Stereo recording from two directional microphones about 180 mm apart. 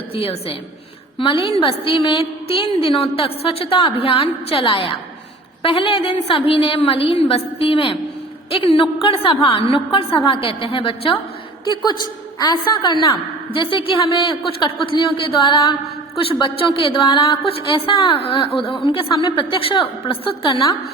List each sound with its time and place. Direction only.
0.1 s a woman's voice: 30° left (ahead or behind)